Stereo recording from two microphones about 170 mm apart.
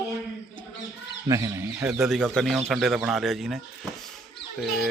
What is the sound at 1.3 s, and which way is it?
Speech, 20° right (ahead or behind).